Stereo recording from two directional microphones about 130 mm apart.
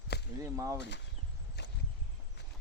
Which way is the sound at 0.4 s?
25° right (ahead or behind).